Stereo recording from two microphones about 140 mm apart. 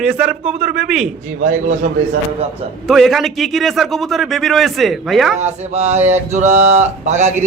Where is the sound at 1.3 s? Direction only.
60° right (ahead or behind).